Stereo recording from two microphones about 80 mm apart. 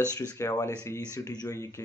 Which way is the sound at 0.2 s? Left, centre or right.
Left.